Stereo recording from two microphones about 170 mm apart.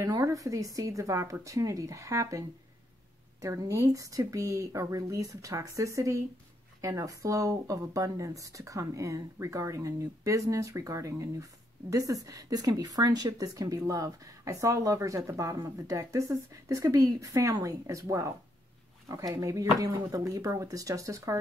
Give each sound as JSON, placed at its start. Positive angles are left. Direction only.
{"t": 0.0, "sound": "speech", "side_deg": -20}
{"t": 3.4, "sound": "speech", "side_deg": -15}